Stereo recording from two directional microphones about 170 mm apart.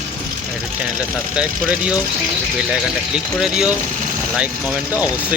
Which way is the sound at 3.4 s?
5° right (ahead or behind).